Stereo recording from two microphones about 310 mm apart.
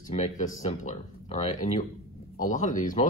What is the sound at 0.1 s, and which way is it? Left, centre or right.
Speech, left.